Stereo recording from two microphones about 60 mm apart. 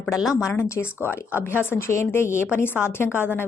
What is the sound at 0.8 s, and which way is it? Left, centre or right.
A woman's voice, left.